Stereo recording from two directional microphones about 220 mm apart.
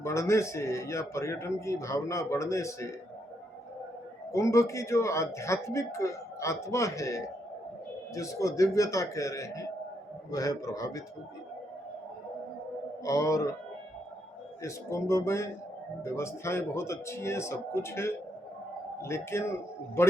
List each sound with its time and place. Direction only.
0.0 s speech: 15° left (ahead or behind)
4.3 s speech: 15° left (ahead or behind)
13.1 s speech: 15° left (ahead or behind)
14.6 s speech: 15° left (ahead or behind)